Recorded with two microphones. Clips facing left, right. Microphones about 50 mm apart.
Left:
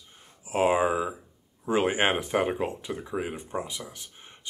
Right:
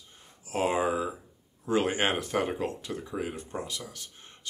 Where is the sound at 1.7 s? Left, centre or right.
Centre.